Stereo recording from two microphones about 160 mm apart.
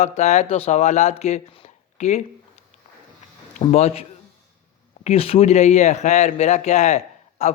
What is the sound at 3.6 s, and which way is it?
A man's voice, 40° left (ahead or behind).